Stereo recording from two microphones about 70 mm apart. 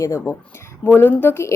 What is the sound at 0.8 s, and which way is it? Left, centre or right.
Speech, left.